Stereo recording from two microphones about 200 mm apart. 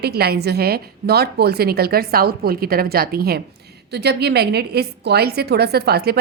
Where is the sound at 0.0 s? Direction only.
50° right (ahead or behind).